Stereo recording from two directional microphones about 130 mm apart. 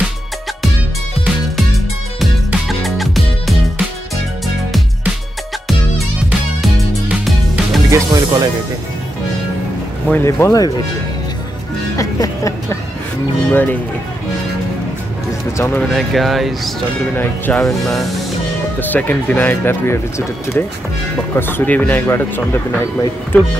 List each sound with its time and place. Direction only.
2.1 s music: centre (ahead or behind)
6.6 s music: centre (ahead or behind)
7.9 s music: 30° right (ahead or behind)
10.0 s speech: 15° left (ahead or behind)
12.0 s speech: 25° left (ahead or behind)
13.5 s speech: 15° left (ahead or behind)
15.5 s speech: 20° left (ahead or behind)
15.8 s speech: centre (ahead or behind)
17.1 s speech: 15° left (ahead or behind)
18.8 s speech: 15° left (ahead or behind)